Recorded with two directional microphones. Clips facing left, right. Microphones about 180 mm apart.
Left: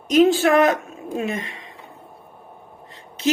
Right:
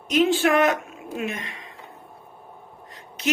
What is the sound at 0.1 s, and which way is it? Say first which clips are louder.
Speech: left 4 dB; 40° left (ahead or behind).